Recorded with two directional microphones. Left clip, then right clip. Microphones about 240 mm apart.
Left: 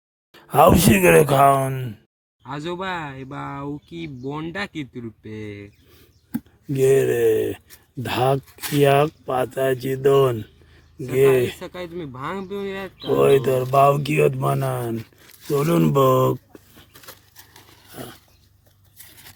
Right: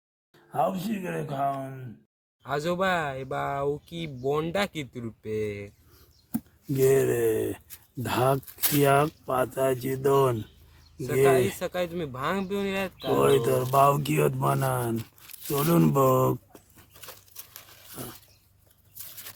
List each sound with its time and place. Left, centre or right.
0.3 s speech: left
2.4 s speech: right
6.7 s speech: centre
11.6 s speech: right
13.1 s speech: centre